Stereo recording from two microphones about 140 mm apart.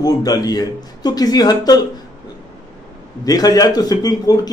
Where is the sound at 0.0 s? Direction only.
30° left (ahead or behind).